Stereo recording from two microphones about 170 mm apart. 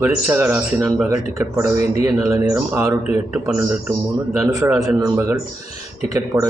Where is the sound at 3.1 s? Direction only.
5° right (ahead or behind).